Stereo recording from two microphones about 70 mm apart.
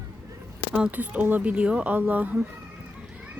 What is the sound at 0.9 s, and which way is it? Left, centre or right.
Speech, right.